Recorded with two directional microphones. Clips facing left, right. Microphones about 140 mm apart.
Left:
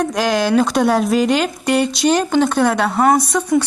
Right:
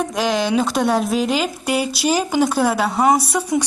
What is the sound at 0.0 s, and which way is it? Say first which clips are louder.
Speech: left 3 dB; centre (ahead or behind).